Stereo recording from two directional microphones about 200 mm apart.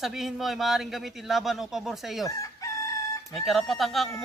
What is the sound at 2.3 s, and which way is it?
Chicken, 15° left (ahead or behind).